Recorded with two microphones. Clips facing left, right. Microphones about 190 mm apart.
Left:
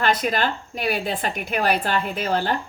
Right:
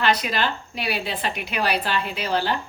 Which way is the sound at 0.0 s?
50° left (ahead or behind).